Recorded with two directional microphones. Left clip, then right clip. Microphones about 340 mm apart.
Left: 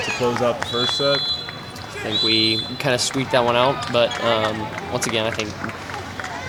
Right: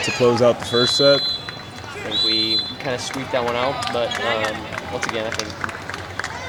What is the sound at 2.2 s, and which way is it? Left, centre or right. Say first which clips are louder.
Speech: even; left.